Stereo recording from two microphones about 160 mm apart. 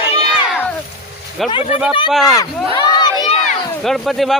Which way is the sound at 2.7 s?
25° left (ahead or behind).